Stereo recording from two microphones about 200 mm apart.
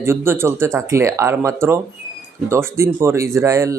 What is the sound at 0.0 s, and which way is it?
Speech, 10° right (ahead or behind).